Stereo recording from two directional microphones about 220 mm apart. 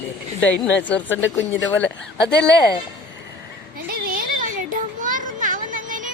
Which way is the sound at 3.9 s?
40° right (ahead or behind).